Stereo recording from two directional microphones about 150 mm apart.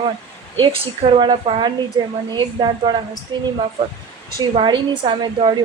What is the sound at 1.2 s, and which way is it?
A woman's voice, 35° right (ahead or behind).